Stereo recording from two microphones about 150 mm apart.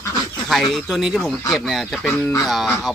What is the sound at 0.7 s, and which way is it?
Speech, centre (ahead or behind).